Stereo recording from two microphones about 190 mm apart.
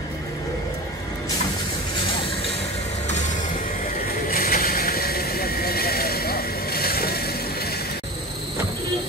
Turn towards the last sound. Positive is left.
turn(degrees=55)  # may be behind; listen again after turning